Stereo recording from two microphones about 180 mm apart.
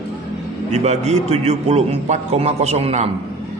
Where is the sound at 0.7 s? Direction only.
40° right (ahead or behind).